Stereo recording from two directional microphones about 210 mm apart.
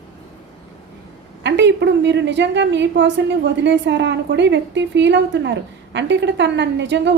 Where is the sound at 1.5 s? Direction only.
55° right (ahead or behind).